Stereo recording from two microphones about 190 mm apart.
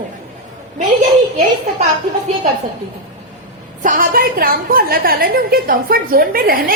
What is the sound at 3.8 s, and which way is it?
A woman's voice, 45° right (ahead or behind).